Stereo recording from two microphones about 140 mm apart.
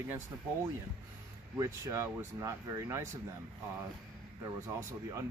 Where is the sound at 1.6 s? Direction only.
20° right (ahead or behind).